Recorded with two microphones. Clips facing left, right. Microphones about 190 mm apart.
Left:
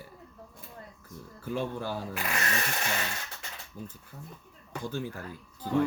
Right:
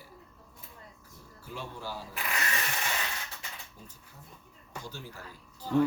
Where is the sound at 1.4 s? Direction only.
55° left (ahead or behind).